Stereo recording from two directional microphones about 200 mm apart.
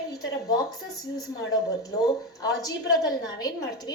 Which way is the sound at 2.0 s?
20° left (ahead or behind).